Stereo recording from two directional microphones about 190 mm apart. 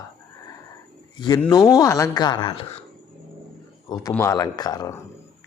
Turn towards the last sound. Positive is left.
turn(degrees=20)  # may be behind; listen again after turning